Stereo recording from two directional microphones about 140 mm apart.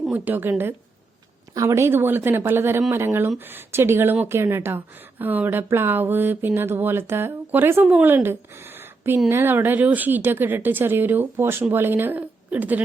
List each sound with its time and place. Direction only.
0.0 s a woman's voice: 10° right (ahead or behind)
1.5 s speech: 20° right (ahead or behind)